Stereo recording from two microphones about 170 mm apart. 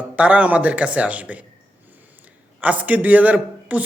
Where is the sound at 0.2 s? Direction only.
5° right (ahead or behind).